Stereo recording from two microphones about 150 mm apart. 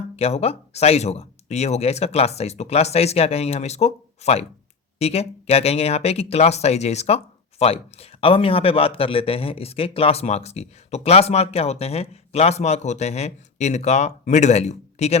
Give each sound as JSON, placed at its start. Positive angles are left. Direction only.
{"t": 0.2, "sound": "a man's voice", "side_deg": 45}